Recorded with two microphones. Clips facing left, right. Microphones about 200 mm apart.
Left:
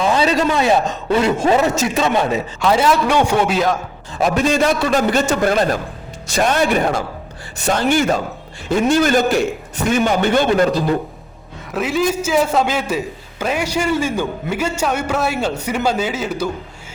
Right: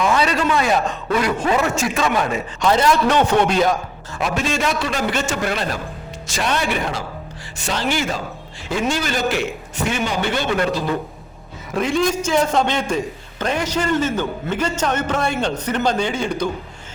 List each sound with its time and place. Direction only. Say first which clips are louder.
0.0 s a man's voice: left 3 dB; 25° left (ahead or behind)
2.6 s a man's voice: left 1 dB; 5° left (ahead or behind)
4.2 s a man's voice: left 6 dB; 40° left (ahead or behind)
6.2 s a man's voice: left 6 dB; 55° left (ahead or behind)
11.7 s a man's voice: left 1 dB; 5° left (ahead or behind)